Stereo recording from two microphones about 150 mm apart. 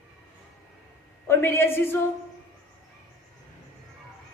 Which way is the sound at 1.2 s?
15° left (ahead or behind).